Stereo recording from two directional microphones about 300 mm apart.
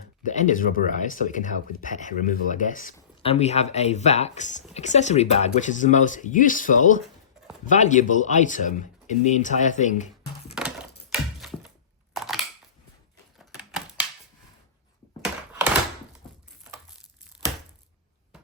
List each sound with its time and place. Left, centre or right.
0.2 s speech: left
11.1 s a sound: centre
13.4 s typewriter: centre